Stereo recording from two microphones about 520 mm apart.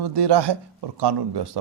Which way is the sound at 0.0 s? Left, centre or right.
Right.